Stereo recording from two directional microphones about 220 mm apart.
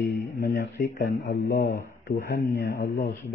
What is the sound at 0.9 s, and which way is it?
A man's voice, 50° left (ahead or behind).